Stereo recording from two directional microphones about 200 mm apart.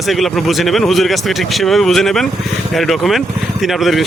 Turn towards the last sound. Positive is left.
turn(degrees=0)  # may be behind; listen again after turning